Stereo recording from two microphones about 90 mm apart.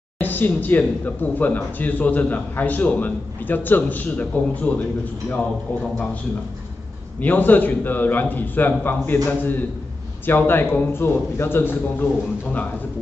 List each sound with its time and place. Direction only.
0.2 s speech: 20° left (ahead or behind)
7.2 s speech: 20° left (ahead or behind)